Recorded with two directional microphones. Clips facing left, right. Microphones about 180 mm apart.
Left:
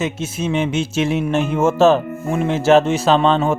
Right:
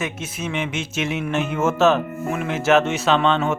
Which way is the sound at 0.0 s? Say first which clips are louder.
Left 6 dB; 30° left (ahead or behind).